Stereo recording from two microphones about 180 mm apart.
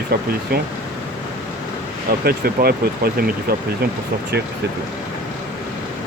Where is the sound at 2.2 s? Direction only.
60° right (ahead or behind).